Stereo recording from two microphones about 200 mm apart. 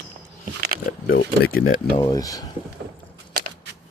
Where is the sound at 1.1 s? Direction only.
55° left (ahead or behind).